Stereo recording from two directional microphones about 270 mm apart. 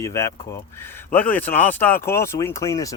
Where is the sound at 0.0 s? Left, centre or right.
Centre.